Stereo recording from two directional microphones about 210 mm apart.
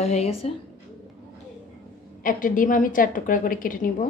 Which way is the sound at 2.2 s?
40° left (ahead or behind).